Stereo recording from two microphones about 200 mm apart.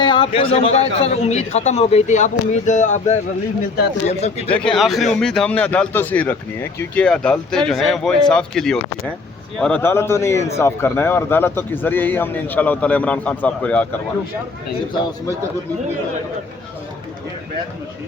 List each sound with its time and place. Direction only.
0.0 s a man's voice: 25° left (ahead or behind)
4.4 s a man's voice: 5° left (ahead or behind)